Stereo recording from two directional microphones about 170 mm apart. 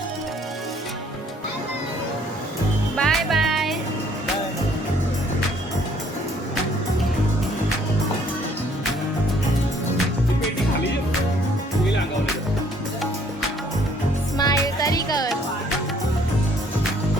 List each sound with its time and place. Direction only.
2.9 s music: centre (ahead or behind)
14.3 s music: 20° left (ahead or behind)